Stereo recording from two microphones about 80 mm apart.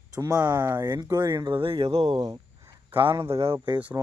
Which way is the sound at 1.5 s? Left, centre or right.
Right.